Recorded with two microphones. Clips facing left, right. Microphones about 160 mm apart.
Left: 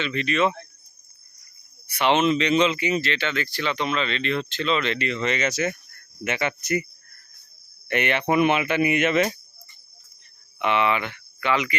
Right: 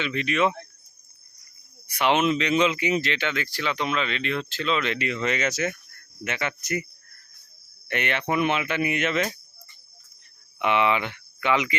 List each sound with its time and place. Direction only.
0.0 s speech: 10° right (ahead or behind)
1.9 s speech: 10° right (ahead or behind); by 6.5 s 5° left (ahead or behind)
7.9 s speech: 5° left (ahead or behind)
10.6 s speech: 15° right (ahead or behind)